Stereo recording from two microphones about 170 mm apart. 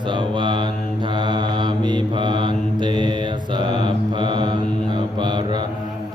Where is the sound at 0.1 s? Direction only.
30° right (ahead or behind).